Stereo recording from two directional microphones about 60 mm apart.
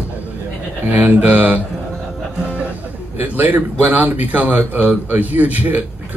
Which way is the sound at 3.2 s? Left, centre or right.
Right.